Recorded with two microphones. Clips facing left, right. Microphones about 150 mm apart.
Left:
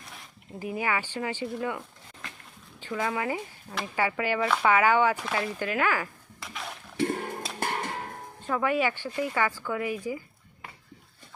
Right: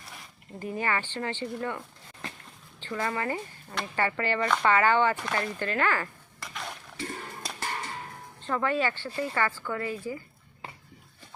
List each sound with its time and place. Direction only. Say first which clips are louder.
0.0 s a sound: even; centre (ahead or behind)
0.7 s speech: left 1 dB; 10° left (ahead or behind)
2.8 s speech: left 1 dB; 5° left (ahead or behind)
6.9 s a sound: left 12 dB; 60° left (ahead or behind)
7.6 s music: left 4 dB; 55° left (ahead or behind)
8.4 s speech: left 1 dB; 10° left (ahead or behind)